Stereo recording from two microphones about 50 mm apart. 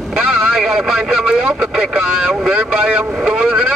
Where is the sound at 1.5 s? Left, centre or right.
Centre.